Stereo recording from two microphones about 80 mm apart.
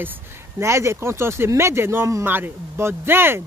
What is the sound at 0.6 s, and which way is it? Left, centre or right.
Speech, right.